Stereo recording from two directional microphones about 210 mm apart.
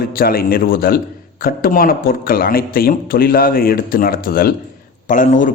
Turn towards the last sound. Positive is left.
turn(degrees=40)  # may be behind; listen again after turning